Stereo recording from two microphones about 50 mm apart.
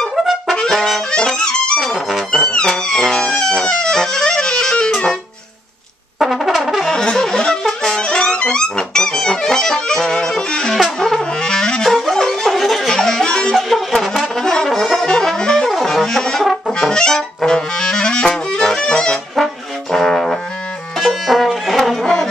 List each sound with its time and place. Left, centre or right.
0.7 s brass instrument: centre
1.1 s music: centre
1.8 s music: centre
2.4 s music: centre
2.7 s music: centre
6.1 s brass instrument: centre
6.9 s music: centre
13.6 s brass instrument: centre
15.2 s saxophone: centre
15.7 s music: centre
16.7 s clarinet: centre
21.0 s music: centre
22.0 s music: centre